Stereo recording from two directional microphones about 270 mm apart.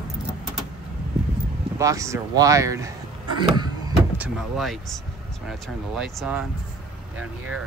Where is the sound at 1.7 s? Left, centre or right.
Centre.